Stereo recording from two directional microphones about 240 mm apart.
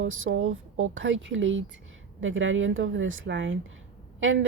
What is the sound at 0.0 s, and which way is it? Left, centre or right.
A woman's voice, right.